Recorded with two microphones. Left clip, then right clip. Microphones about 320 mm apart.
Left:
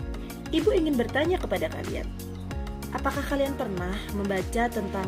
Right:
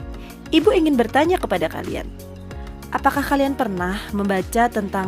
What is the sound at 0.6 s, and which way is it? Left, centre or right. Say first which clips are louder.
Speech: right 6 dB; right.